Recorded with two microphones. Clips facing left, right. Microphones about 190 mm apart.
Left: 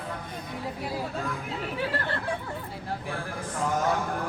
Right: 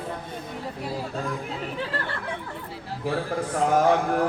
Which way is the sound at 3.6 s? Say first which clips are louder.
Right 6 dB; 70° right (ahead or behind).